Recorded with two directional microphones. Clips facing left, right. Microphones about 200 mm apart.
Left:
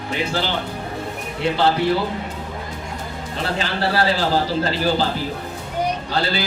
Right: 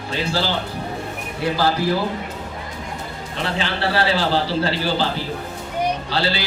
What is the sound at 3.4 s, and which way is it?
A man's voice, 40° left (ahead or behind).